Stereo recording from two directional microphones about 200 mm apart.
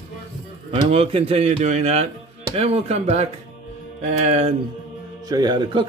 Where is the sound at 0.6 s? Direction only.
30° right (ahead or behind).